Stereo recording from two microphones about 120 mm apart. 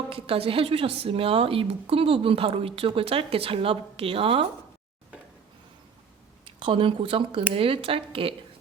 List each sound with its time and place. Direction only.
0.1 s a woman's voice: 50° right (ahead or behind)
6.4 s a woman's voice: 45° right (ahead or behind)